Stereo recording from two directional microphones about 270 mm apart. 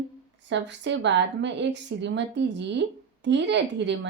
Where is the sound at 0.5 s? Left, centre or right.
Right.